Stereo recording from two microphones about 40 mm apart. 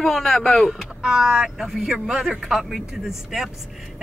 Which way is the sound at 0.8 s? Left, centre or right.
Centre.